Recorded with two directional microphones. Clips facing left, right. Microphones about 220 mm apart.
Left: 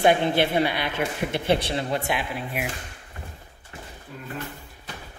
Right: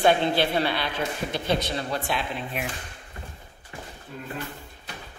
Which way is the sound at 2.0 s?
10° left (ahead or behind).